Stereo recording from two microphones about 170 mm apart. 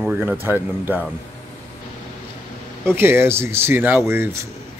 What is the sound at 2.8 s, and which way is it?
Speech, 10° right (ahead or behind).